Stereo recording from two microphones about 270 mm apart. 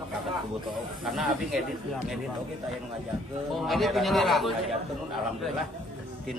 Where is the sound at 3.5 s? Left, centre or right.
Centre.